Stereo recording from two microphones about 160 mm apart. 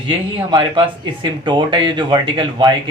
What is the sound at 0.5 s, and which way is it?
Speech, 30° right (ahead or behind).